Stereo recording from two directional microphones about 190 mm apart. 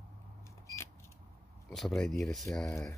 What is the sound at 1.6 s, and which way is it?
Speech, centre (ahead or behind).